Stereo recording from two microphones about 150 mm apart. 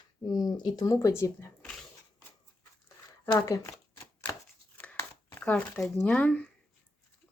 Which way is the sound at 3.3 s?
20° left (ahead or behind).